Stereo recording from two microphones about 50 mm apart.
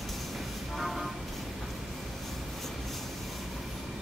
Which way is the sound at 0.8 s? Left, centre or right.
Centre.